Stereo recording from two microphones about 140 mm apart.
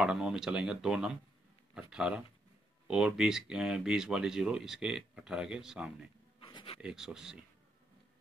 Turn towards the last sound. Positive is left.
turn(degrees=-5)  # may be behind; listen again after turning